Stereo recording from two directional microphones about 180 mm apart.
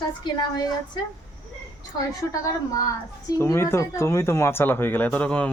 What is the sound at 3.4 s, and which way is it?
Speech, 15° left (ahead or behind).